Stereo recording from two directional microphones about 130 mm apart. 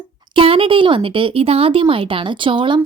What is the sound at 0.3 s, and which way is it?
Speech, 45° right (ahead or behind).